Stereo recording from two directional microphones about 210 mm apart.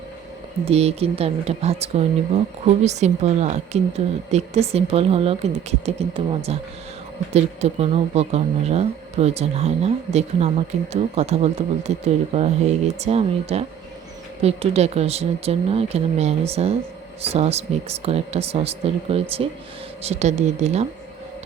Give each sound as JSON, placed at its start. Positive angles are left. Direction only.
{"t": 0.6, "sound": "a woman's voice", "side_deg": -30}